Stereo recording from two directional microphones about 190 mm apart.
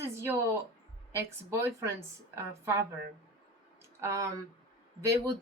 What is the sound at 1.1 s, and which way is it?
Speech, 15° right (ahead or behind).